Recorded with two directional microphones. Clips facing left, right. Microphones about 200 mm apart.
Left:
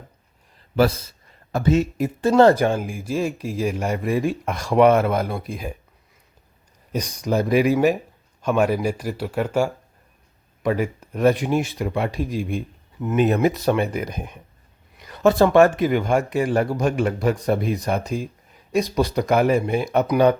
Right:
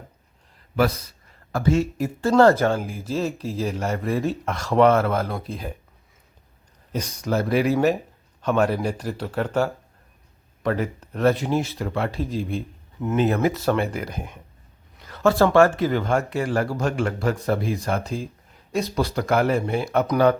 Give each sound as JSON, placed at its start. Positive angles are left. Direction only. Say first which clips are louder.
{"t": 0.8, "sound": "speech", "louder": "left 3 dB", "side_deg": 30}
{"t": 6.9, "sound": "speech", "louder": "left 2 dB", "side_deg": 15}
{"t": 14.9, "sound": "a sound", "louder": "left 2 dB", "side_deg": 15}
{"t": 15.5, "sound": "speech", "louder": "left 2 dB", "side_deg": 20}